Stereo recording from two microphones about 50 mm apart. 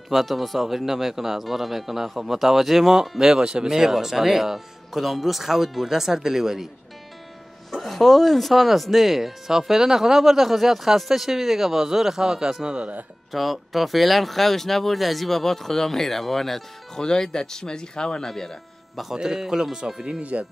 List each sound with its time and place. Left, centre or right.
0.1 s a man's voice: centre
7.7 s a man's voice: centre
13.3 s a man's voice: centre
19.1 s speech: centre
20.1 s speech: right